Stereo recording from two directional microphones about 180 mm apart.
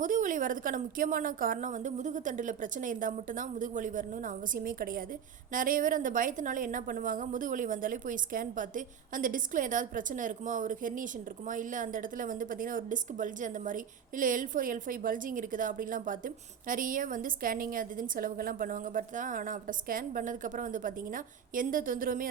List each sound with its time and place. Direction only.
0.0 s a woman's voice: 45° right (ahead or behind)